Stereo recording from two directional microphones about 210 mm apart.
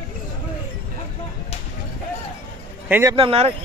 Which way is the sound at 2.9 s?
10° right (ahead or behind).